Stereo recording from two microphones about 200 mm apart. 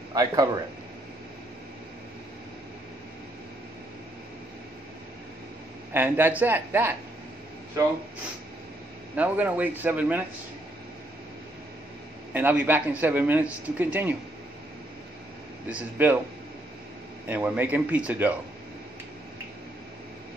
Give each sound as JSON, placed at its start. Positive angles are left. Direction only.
{"t": 0.1, "sound": "speech", "side_deg": -20}
{"t": 5.9, "sound": "speech", "side_deg": -10}
{"t": 9.1, "sound": "speech", "side_deg": -10}
{"t": 12.3, "sound": "speech", "side_deg": -10}
{"t": 15.7, "sound": "speech", "side_deg": -10}
{"t": 17.3, "sound": "speech", "side_deg": -10}